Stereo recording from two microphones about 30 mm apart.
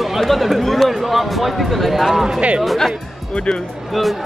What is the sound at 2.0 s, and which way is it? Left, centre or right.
Speech, centre.